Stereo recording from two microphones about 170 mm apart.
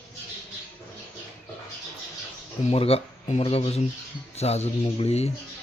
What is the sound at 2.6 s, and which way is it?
Speech, 35° left (ahead or behind).